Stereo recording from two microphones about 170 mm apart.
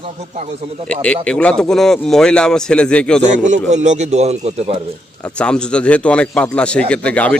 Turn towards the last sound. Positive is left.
turn(degrees=5)  # may be behind; listen again after turning